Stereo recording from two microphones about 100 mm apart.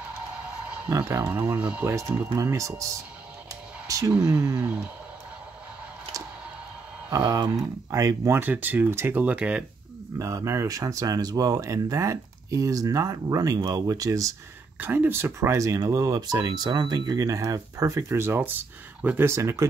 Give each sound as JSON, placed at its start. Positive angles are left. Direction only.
{"t": 0.9, "sound": "speech", "side_deg": -25}
{"t": 1.9, "sound": "speech", "side_deg": -30}
{"t": 3.8, "sound": "a sound", "side_deg": -35}
{"t": 4.3, "sound": "speech", "side_deg": -30}
{"t": 7.1, "sound": "speech", "side_deg": -35}
{"t": 8.4, "sound": "speech", "side_deg": -20}
{"t": 10.1, "sound": "speech", "side_deg": -35}
{"t": 14.8, "sound": "speech", "side_deg": -20}